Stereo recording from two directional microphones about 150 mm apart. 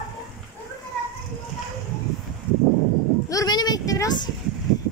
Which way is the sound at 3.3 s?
25° left (ahead or behind).